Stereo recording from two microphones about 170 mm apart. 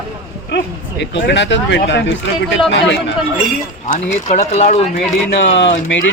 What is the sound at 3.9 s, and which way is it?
Speech, 45° left (ahead or behind).